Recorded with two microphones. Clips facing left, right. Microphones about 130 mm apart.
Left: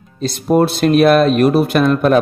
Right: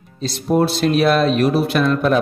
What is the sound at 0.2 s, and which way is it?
Speech, 55° left (ahead or behind).